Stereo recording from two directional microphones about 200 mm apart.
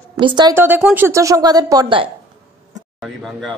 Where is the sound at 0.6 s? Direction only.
10° right (ahead or behind).